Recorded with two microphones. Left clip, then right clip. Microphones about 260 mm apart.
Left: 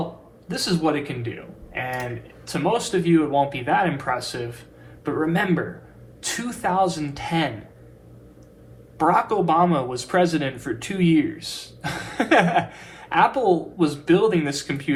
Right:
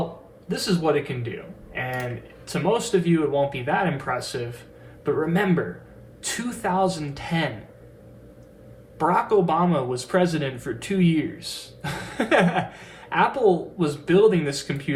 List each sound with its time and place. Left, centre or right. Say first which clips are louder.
0.6 s speech: even; left
1.7 s a sound: left 1 dB; left
2.5 s speech: even; left
9.0 s speech: left 1 dB; left